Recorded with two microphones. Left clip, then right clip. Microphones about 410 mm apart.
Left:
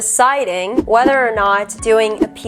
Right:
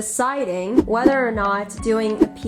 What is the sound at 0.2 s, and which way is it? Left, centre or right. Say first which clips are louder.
Speech: left 8 dB; left.